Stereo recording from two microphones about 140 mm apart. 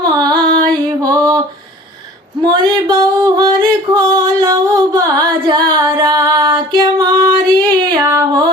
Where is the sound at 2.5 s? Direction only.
30° right (ahead or behind).